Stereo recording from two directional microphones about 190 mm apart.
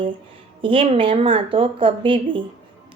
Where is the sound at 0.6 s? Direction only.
25° right (ahead or behind).